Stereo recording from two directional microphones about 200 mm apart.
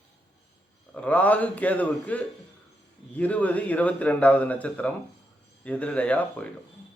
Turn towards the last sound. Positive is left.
turn(degrees=5)  # may be behind; listen again after turning